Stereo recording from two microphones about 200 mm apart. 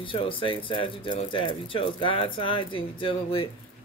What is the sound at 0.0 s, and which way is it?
Speech, 25° left (ahead or behind).